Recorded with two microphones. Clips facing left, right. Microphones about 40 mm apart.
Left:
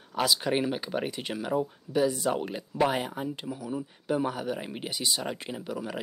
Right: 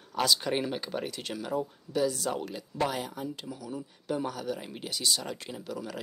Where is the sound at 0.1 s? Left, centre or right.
Centre.